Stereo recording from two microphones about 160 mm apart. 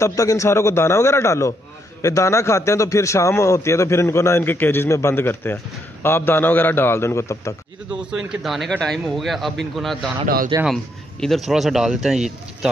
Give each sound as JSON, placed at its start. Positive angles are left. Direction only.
{"t": 0.0, "sound": "a man's voice", "side_deg": 20}
{"t": 8.1, "sound": "a man's voice", "side_deg": -5}
{"t": 10.2, "sound": "a man's voice", "side_deg": -60}
{"t": 10.6, "sound": "a man's voice", "side_deg": 0}